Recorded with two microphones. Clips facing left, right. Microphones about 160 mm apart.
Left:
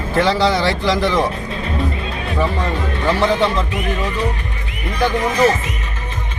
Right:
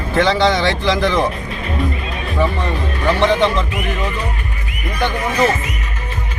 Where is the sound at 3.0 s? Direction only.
5° left (ahead or behind).